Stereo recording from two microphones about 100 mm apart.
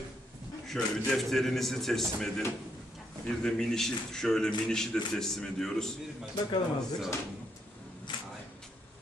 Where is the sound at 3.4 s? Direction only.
5° left (ahead or behind).